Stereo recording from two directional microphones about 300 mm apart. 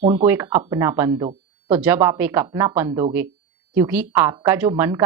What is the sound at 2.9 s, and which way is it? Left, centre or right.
Speech, centre.